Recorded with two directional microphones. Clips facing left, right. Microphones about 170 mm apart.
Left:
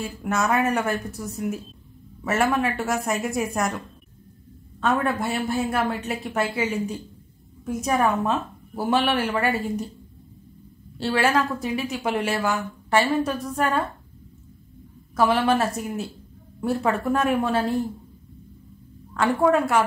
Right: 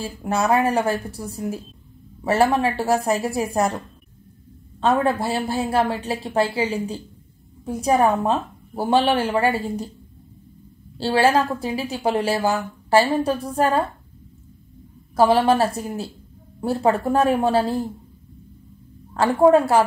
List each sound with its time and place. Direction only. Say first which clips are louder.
0.0 s a woman's voice: right 2 dB; 30° right (ahead or behind)
11.0 s a woman's voice: right 4 dB; 30° right (ahead or behind)
15.1 s a woman's voice: right 4 dB; 35° right (ahead or behind)
19.1 s a woman's voice: right 5 dB; 30° right (ahead or behind)